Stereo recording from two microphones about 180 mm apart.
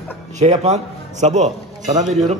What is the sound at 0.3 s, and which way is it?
A man's voice, 40° right (ahead or behind).